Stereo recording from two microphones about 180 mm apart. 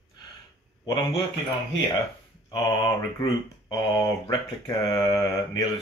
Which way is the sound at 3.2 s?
20° left (ahead or behind).